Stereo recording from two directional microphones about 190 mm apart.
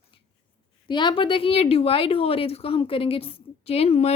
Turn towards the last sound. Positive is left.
turn(degrees=35)  # may be behind; listen again after turning